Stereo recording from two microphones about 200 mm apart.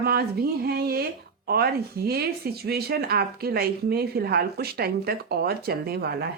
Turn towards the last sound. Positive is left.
turn(degrees=-50)  # may be behind; listen again after turning